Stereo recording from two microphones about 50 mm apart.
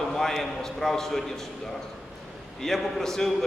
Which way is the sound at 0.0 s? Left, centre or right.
Centre.